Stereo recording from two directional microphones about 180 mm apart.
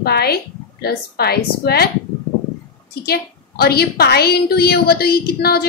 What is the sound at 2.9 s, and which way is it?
A woman's voice, 60° left (ahead or behind).